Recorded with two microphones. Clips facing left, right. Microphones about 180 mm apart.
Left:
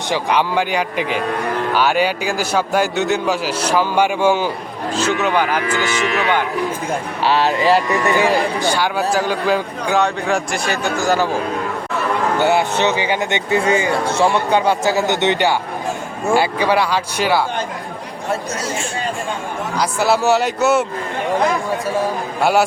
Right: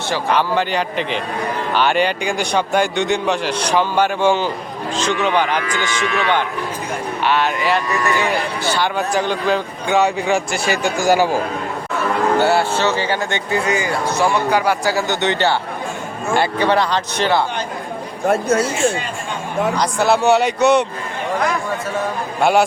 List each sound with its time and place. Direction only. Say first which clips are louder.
0.1 s a man's voice: even; 15° left (ahead or behind)
7.2 s speech: left 2 dB; 35° left (ahead or behind)
8.6 s a man's voice: left 1 dB; 10° left (ahead or behind)
10.9 s speech: right 2 dB; 10° right (ahead or behind)
12.4 s speech: left 3 dB; 15° left (ahead or behind)
18.3 s speech: right 7 dB; 55° right (ahead or behind)
19.8 s a man's voice: left 1 dB; 5° left (ahead or behind)
22.4 s a man's voice: right 1 dB; 5° left (ahead or behind)